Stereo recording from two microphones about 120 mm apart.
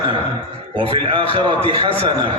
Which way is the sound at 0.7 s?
45° right (ahead or behind).